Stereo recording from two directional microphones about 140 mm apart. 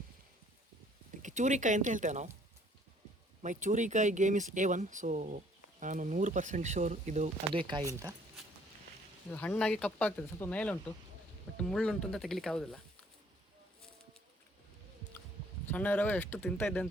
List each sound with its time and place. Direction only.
1.2 s speech: 60° right (ahead or behind)
3.4 s speech: 65° right (ahead or behind)
7.7 s speech: 25° right (ahead or behind)
9.3 s speech: 10° left (ahead or behind)
15.6 s speech: 10° left (ahead or behind)